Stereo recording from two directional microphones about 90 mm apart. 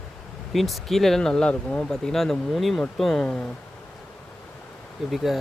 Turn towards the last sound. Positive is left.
turn(degrees=0)  # may be behind; listen again after turning